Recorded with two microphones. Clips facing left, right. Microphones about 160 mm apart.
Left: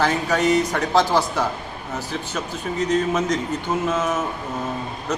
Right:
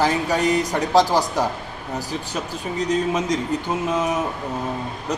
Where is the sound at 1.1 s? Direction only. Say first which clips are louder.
Even; 40° right (ahead or behind).